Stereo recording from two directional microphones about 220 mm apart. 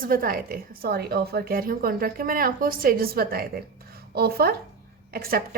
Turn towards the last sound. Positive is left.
turn(degrees=-40)  # may be behind; listen again after turning